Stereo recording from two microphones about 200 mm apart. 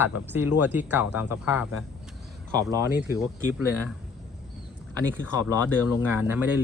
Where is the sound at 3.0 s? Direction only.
10° right (ahead or behind).